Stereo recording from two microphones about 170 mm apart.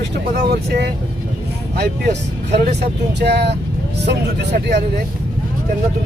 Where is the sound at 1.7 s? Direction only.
70° right (ahead or behind).